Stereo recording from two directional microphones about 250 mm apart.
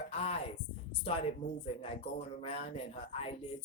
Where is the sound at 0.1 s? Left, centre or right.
Left.